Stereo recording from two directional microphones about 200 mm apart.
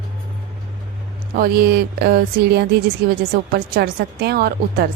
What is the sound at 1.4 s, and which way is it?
Speech, 50° right (ahead or behind).